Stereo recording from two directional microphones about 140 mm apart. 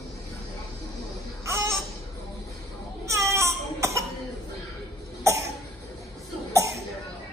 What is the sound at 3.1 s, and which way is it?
Cough, 20° right (ahead or behind).